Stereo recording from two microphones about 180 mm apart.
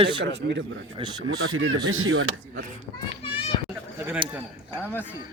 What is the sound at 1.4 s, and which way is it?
Speech, 90° right.